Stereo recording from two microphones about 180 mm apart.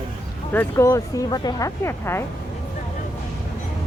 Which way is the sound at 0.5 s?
15° left (ahead or behind).